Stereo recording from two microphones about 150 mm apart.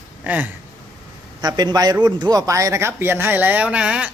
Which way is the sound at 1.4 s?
25° right (ahead or behind).